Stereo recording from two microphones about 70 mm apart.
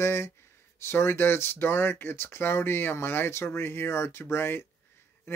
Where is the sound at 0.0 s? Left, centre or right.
Left.